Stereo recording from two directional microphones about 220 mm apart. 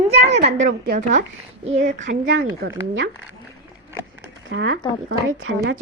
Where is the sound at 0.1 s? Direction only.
50° right (ahead or behind).